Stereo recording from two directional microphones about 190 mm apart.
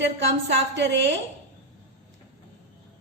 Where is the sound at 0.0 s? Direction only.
70° right (ahead or behind).